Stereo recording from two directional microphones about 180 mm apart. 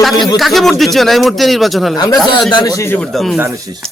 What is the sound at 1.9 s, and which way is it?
Speech, 20° left (ahead or behind).